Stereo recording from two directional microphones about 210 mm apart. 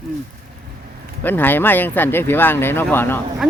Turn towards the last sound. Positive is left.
turn(degrees=10)  # may be behind; listen again after turning